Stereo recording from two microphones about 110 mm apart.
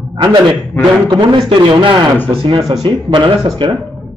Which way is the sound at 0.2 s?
40° right (ahead or behind).